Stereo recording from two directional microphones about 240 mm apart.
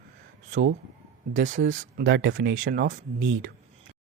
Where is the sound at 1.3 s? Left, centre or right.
Right.